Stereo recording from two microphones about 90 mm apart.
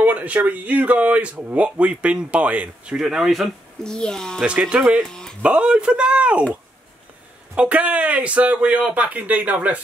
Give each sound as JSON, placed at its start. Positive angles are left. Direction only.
{"t": 0.0, "sound": "speech", "side_deg": -15}
{"t": 3.0, "sound": "speech", "side_deg": -5}
{"t": 4.4, "sound": "speech", "side_deg": -10}
{"t": 5.0, "sound": "music", "side_deg": 5}
{"t": 5.4, "sound": "speech", "side_deg": -10}
{"t": 7.5, "sound": "speech", "side_deg": -15}